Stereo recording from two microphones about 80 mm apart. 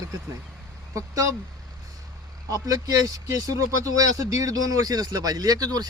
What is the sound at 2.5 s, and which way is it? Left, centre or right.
Speech, right.